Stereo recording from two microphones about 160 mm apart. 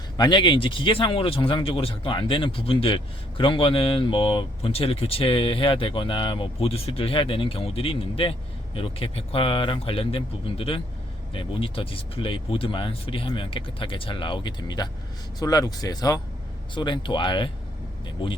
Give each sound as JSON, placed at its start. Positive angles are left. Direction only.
{"t": 0.2, "sound": "speech", "side_deg": 30}